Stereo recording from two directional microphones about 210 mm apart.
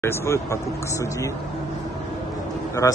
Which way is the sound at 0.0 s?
15° left (ahead or behind).